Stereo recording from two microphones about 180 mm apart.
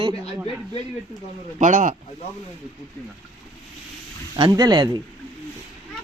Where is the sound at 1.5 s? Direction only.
45° right (ahead or behind).